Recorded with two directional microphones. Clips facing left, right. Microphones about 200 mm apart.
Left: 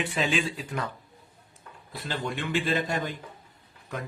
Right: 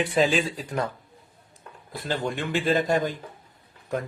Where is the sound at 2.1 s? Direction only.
45° right (ahead or behind).